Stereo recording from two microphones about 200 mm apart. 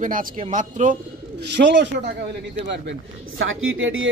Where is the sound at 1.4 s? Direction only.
60° right (ahead or behind); by 4.1 s 75° right (ahead or behind).